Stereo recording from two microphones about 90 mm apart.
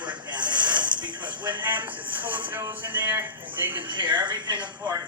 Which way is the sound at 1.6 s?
20° right (ahead or behind).